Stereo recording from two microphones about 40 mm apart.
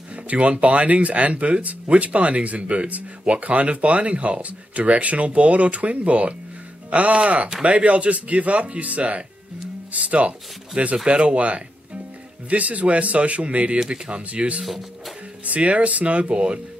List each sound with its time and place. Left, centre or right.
0.1 s speech: right
14.6 s speech: centre
15.4 s speech: right